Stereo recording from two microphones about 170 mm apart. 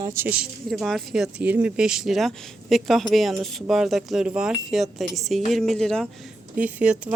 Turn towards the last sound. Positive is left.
turn(degrees=-5)  # may be behind; listen again after turning